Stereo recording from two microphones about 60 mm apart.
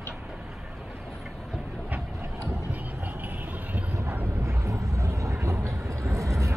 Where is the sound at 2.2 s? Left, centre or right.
Right.